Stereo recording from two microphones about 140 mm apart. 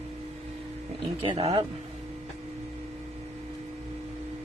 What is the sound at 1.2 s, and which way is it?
Speech, 40° right (ahead or behind).